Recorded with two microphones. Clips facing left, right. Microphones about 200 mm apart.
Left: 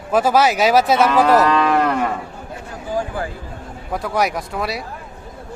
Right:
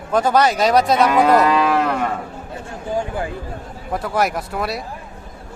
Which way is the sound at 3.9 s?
Centre (ahead or behind).